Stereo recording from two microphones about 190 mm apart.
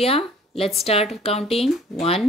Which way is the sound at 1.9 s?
30° left (ahead or behind).